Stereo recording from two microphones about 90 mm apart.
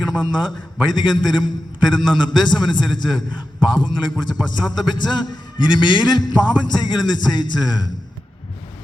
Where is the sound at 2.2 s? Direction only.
55° left (ahead or behind).